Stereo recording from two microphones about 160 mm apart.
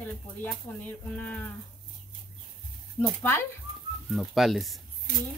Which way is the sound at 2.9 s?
15° left (ahead or behind).